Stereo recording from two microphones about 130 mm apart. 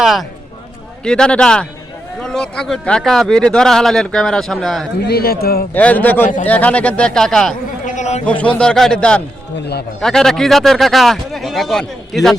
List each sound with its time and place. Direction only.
0.0 s a man's voice: centre (ahead or behind)
7.9 s a sound: 65° left (ahead or behind)
8.3 s a man's voice: 10° left (ahead or behind)